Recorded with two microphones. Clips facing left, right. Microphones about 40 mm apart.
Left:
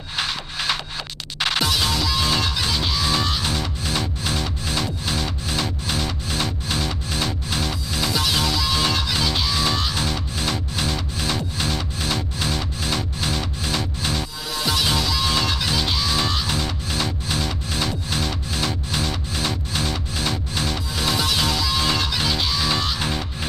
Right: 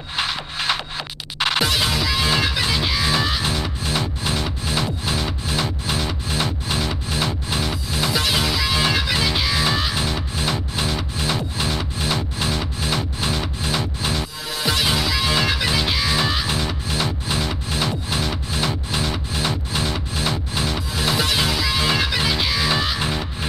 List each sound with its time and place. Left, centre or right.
0.2 s music: centre